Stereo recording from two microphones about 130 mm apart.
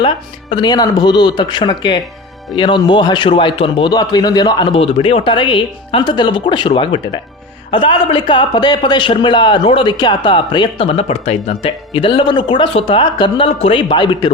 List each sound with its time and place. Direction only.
0.5 s a man's voice: 35° left (ahead or behind)
10.8 s a man's voice: 50° left (ahead or behind)